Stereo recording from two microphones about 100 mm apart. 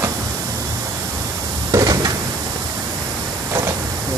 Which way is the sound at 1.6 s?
35° right (ahead or behind).